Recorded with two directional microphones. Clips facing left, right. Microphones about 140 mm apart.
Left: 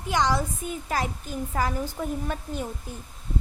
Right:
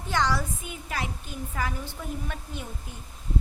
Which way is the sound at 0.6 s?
40° left (ahead or behind).